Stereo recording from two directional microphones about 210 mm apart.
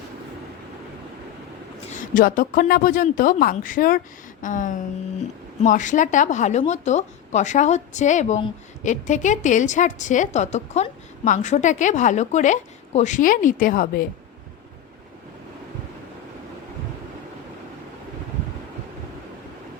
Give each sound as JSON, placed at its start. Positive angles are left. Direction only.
{"t": 2.0, "sound": "a woman's voice", "side_deg": 40}